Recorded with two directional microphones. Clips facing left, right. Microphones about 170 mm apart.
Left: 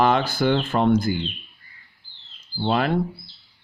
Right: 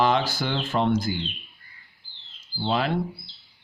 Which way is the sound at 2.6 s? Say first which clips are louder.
Left 3 dB; 55° left (ahead or behind).